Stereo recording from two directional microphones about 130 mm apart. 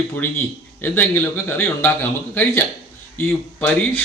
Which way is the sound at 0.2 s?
15° left (ahead or behind).